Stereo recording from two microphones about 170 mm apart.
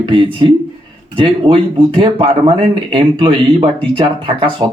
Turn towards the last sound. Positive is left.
turn(degrees=-30)  # may be behind; listen again after turning